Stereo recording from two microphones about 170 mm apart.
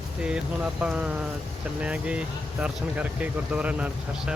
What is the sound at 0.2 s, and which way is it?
Speech, 5° right (ahead or behind).